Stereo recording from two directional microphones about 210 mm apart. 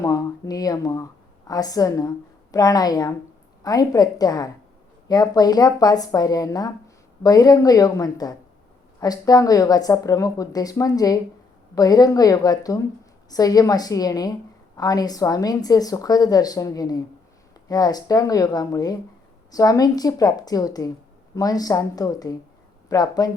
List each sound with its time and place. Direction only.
0.0 s speech: 15° left (ahead or behind)